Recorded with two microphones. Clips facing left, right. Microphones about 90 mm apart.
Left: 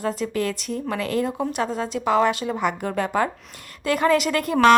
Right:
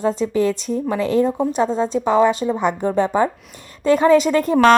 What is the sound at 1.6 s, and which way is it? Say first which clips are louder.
A woman's voice: right 7 dB; 30° right (ahead or behind).